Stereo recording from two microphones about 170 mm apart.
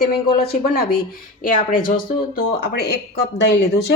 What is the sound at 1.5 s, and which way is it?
Speech, 55° left (ahead or behind).